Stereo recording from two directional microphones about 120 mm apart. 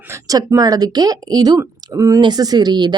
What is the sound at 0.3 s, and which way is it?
Speech, 30° right (ahead or behind).